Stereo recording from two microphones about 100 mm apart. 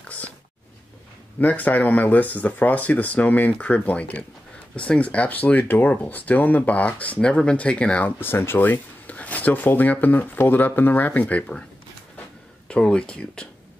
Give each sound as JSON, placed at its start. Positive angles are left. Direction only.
{"t": 1.4, "sound": "speech", "side_deg": 15}
{"t": 12.6, "sound": "speech", "side_deg": 10}